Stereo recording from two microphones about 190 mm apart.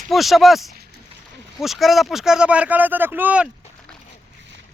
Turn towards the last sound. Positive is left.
turn(degrees=-10)  # may be behind; listen again after turning